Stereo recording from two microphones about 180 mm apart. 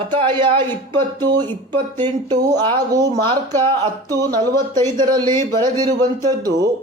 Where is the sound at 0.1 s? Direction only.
25° right (ahead or behind).